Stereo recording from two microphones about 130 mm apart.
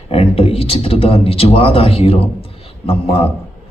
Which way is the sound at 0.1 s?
45° left (ahead or behind).